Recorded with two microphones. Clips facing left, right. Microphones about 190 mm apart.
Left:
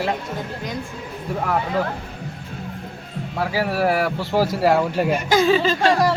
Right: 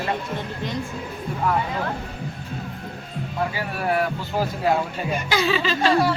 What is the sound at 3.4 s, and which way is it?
A man's voice, 80° left.